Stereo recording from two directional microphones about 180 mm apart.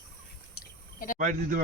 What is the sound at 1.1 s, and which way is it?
Speech, 45° right (ahead or behind).